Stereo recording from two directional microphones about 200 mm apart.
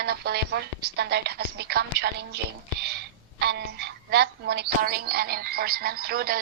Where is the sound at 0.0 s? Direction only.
55° right (ahead or behind).